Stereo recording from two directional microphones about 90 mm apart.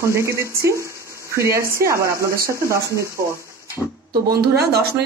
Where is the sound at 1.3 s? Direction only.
35° right (ahead or behind).